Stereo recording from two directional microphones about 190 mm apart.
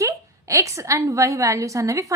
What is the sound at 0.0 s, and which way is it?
A woman's voice, 15° right (ahead or behind).